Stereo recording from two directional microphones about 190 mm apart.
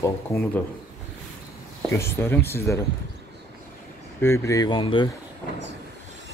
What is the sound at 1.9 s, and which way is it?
Speech, 15° left (ahead or behind).